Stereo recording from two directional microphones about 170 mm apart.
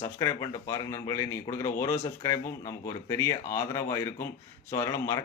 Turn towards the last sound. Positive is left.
turn(degrees=15)  # may be behind; listen again after turning